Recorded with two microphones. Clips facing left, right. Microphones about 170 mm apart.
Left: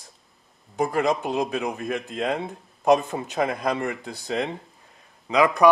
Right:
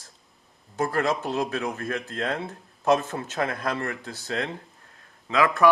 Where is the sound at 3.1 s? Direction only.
15° left (ahead or behind).